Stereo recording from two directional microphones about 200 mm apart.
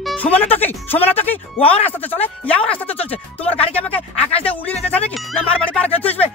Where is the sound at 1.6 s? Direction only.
30° left (ahead or behind).